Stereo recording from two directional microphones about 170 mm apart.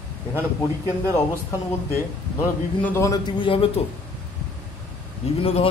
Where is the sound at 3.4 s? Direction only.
30° left (ahead or behind).